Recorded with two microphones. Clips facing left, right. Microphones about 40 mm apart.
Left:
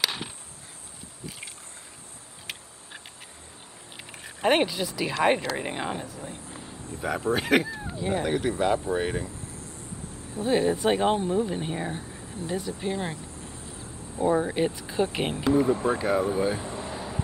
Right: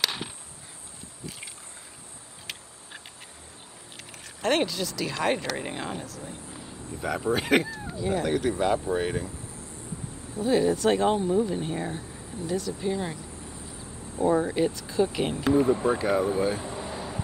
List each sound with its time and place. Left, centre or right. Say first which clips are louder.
0.0 s chop: even; centre
4.4 s speech: left 2 dB; centre
7.7 s speech: even; left; by 9.3 s centre
10.3 s speech: right 1 dB; left
15.5 s speech: right 1 dB; centre